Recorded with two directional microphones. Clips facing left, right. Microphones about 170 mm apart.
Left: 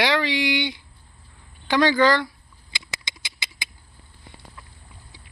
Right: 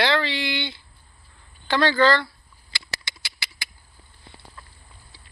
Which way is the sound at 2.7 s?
20° left (ahead or behind).